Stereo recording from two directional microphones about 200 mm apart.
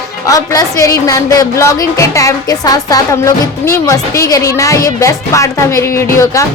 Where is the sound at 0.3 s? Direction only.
15° left (ahead or behind).